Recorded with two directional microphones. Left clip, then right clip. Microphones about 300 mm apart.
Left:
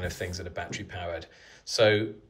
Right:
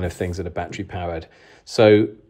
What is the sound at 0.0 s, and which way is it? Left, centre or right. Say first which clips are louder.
Speech: right 8 dB; centre.